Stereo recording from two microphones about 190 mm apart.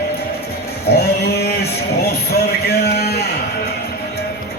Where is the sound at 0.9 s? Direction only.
55° left (ahead or behind).